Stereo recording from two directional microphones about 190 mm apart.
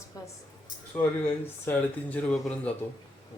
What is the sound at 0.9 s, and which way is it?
Speech, 10° left (ahead or behind).